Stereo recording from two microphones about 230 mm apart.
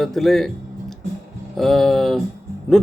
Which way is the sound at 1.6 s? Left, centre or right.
Centre.